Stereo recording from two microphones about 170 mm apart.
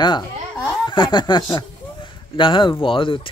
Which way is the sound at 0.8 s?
25° left (ahead or behind).